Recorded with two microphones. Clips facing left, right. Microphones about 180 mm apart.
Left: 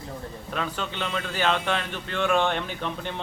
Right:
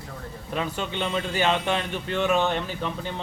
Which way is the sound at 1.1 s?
10° right (ahead or behind).